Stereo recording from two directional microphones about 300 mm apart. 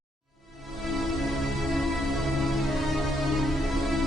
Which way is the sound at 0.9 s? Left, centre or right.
Centre.